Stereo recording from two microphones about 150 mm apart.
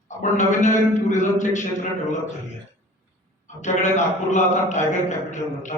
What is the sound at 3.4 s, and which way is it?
A man's voice, 50° left (ahead or behind).